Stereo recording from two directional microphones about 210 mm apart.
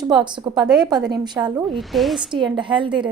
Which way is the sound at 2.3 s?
20° right (ahead or behind).